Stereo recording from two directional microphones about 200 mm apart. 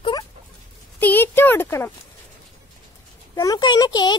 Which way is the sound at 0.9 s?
10° left (ahead or behind).